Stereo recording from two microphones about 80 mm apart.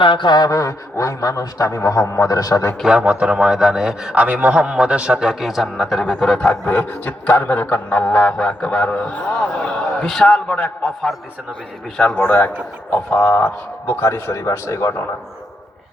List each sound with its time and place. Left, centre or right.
0.1 s mantra: left
0.5 s a man's voice: left
2.8 s a man's voice: centre
6.7 s a sound: left
12.9 s speech: left